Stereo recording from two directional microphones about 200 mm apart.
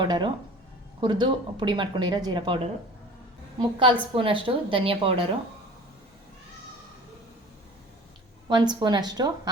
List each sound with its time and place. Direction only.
0.0 s speech: 25° right (ahead or behind)
3.6 s speech: 25° right (ahead or behind)
8.4 s speech: 20° right (ahead or behind)